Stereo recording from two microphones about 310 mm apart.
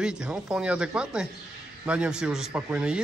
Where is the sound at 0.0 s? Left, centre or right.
Centre.